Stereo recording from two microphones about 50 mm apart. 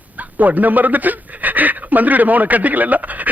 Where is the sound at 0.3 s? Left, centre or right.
Right.